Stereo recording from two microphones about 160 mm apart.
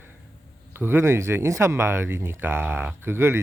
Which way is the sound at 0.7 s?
15° right (ahead or behind).